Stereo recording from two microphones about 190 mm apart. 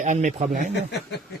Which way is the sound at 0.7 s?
65° left (ahead or behind).